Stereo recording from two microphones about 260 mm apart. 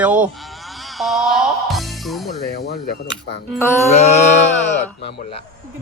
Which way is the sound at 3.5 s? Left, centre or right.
Centre.